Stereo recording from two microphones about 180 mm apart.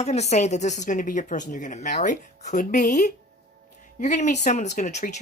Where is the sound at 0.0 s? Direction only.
35° left (ahead or behind).